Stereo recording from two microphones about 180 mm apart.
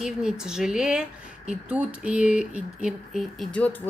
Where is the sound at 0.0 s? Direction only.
5° right (ahead or behind).